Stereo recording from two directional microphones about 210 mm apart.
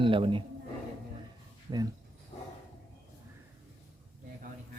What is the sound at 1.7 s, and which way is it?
Speech, 20° right (ahead or behind).